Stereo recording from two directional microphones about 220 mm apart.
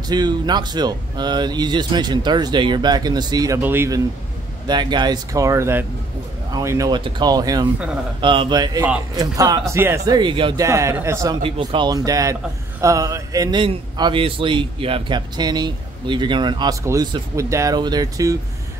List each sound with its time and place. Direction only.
0.1 s a man's voice: 20° right (ahead or behind)